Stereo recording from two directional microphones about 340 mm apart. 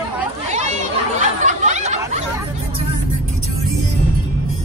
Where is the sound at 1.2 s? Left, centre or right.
Right.